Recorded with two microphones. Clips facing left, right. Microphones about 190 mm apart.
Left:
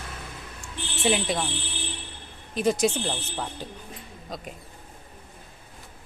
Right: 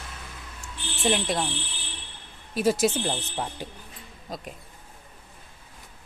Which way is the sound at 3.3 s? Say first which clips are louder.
Right 1 dB; 15° right (ahead or behind).